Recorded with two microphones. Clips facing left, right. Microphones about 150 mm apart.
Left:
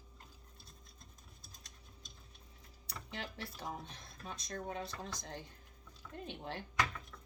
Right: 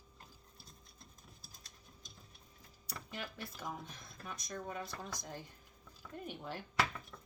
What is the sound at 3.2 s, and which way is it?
Speech, 30° left (ahead or behind).